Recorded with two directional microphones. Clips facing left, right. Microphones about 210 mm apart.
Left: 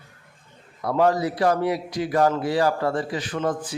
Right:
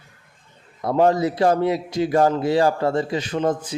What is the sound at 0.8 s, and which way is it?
A man's voice, 25° right (ahead or behind).